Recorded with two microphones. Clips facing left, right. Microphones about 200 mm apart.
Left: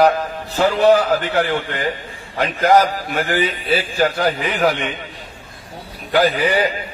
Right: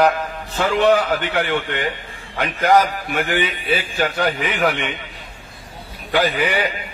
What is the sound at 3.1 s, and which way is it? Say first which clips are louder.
A man's voice: left 1 dB; 35° left (ahead or behind).